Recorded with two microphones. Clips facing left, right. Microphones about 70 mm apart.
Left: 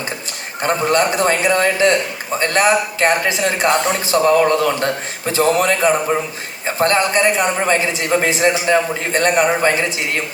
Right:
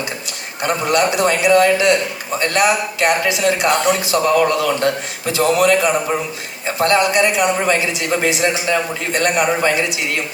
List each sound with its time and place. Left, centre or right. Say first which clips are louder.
0.6 s speech: left 1 dB; left